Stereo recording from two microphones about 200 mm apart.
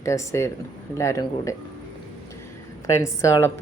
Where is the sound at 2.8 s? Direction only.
15° left (ahead or behind).